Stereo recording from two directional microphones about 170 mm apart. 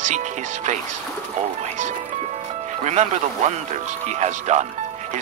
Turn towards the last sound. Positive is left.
turn(degrees=-45)  # may be behind; listen again after turning